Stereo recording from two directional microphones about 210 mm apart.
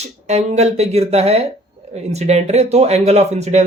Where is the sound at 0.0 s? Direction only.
30° right (ahead or behind).